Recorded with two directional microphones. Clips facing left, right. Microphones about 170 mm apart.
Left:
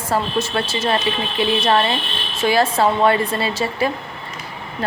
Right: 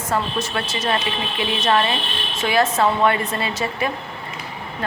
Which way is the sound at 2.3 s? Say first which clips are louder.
Left 2 dB; 30° left (ahead or behind).